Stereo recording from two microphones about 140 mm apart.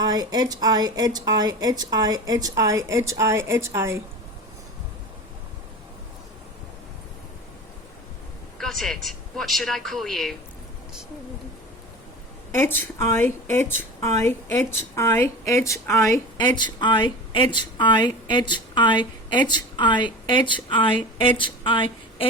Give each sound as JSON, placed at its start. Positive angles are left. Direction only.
{"t": 0.0, "sound": "speech", "side_deg": -30}
{"t": 8.5, "sound": "a man's voice", "side_deg": 5}
{"t": 12.5, "sound": "a woman's voice", "side_deg": 15}
{"t": 16.6, "sound": "speech", "side_deg": 35}